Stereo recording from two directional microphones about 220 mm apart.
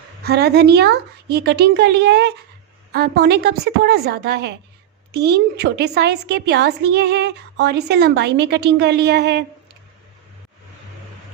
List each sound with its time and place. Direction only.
0.3 s a woman's voice: 45° right (ahead or behind)